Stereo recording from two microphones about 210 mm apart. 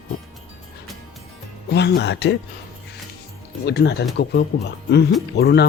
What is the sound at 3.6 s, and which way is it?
Speech, 50° left (ahead or behind).